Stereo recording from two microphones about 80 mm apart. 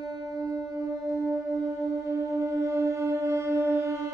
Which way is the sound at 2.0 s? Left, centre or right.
Right.